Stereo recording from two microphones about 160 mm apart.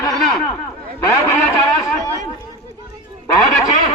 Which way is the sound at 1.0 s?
20° left (ahead or behind).